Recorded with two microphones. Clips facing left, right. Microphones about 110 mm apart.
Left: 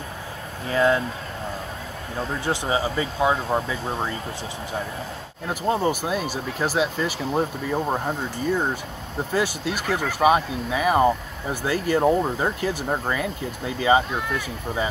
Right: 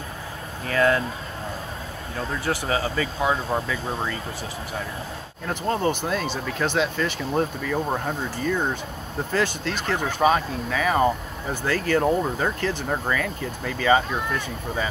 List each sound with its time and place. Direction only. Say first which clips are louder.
0.7 s speech: left 1 dB; 20° left (ahead or behind)
2.4 s speech: left 1 dB; 20° left (ahead or behind)
5.5 s speech: left 1 dB; 10° left (ahead or behind)
9.3 s speech: even; 10° left (ahead or behind)